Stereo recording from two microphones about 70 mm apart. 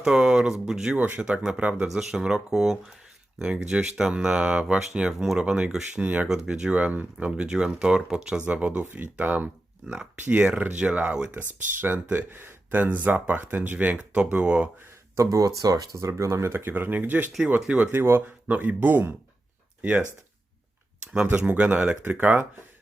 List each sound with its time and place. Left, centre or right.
0.0 s speech: centre
0.9 s speech: right
1.9 s speech: centre
6.2 s speech: centre; by 12.5 s right
12.7 s speech: right
15.1 s speech: right
16.0 s speech: right
18.4 s speech: right
21.2 s speech: right